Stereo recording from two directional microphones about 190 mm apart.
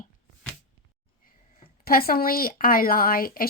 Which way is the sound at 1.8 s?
50° left (ahead or behind).